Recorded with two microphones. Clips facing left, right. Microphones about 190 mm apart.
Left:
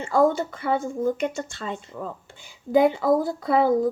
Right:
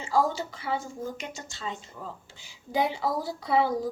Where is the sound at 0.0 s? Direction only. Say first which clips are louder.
Left 6 dB; 55° left (ahead or behind).